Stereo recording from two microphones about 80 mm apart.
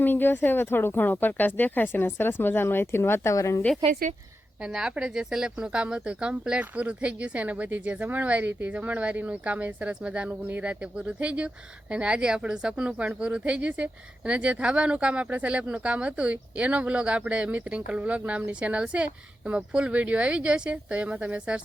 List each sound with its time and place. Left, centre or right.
0.0 s speech: left
3.8 s speech: right
4.6 s speech: centre